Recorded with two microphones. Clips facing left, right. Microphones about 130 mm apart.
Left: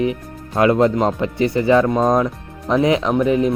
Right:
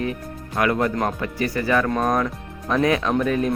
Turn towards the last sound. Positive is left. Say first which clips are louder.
# left 5 dB
turn(degrees=20)  # may be behind; listen again after turning